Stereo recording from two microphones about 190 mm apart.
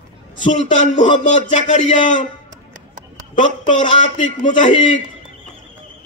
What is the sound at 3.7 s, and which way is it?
A man's voice, 40° left (ahead or behind).